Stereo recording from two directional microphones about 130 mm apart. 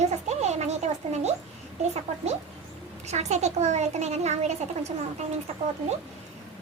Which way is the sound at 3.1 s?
60° right (ahead or behind).